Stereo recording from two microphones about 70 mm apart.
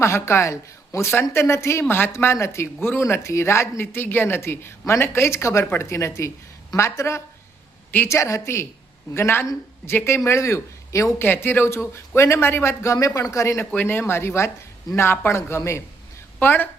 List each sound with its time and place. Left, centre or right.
0.0 s speech: left
11.2 s speech: left
13.7 s speech: left
16.4 s speech: left